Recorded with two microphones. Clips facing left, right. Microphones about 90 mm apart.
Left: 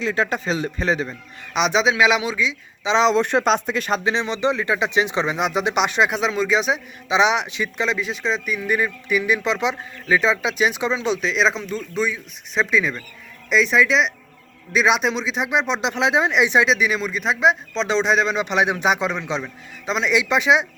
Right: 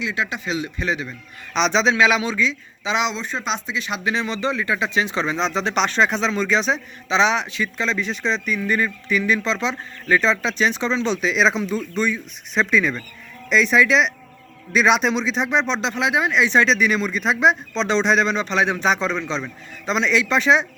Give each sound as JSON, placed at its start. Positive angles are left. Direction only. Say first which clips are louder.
{"t": 0.0, "sound": "a man's voice", "louder": "left 4 dB", "side_deg": 40}
{"t": 1.5, "sound": "speech", "louder": "even", "side_deg": 10}
{"t": 2.8, "sound": "speech", "louder": "left 4 dB", "side_deg": 30}
{"t": 3.1, "sound": "speech", "louder": "left 9 dB", "side_deg": 60}
{"t": 4.0, "sound": "speech", "louder": "right 1 dB", "side_deg": 20}
{"t": 7.9, "sound": "speech", "louder": "even", "side_deg": 5}
{"t": 16.6, "sound": "speech", "louder": "right 1 dB", "side_deg": 5}
{"t": 18.4, "sound": "speech", "louder": "even", "side_deg": 15}